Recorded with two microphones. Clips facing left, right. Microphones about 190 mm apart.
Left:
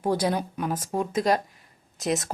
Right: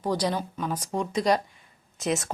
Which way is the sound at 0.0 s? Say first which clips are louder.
Left 2 dB; 10° left (ahead or behind).